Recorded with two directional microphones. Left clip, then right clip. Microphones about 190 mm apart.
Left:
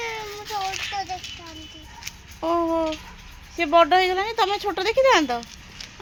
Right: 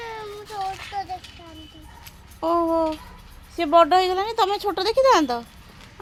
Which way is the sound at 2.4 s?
10° right (ahead or behind).